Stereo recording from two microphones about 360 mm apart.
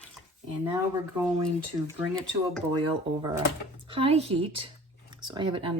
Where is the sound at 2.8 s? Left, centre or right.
Centre.